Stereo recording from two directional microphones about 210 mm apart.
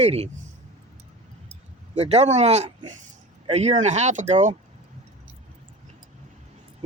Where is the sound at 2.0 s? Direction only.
30° right (ahead or behind).